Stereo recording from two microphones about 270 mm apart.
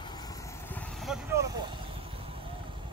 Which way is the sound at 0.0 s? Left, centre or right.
Centre.